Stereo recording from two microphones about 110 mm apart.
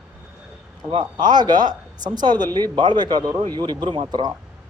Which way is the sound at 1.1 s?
40° right (ahead or behind).